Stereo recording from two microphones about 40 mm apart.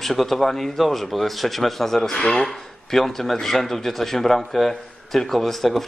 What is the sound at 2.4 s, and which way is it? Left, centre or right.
A man's voice, centre.